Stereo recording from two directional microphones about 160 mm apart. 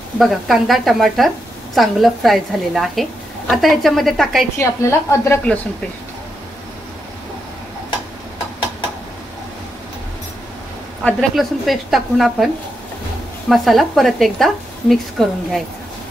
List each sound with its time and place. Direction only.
0.2 s a woman's voice: centre (ahead or behind)
4.6 s a woman's voice: 15° left (ahead or behind)
11.1 s a woman's voice: centre (ahead or behind)
13.5 s a woman's voice: centre (ahead or behind)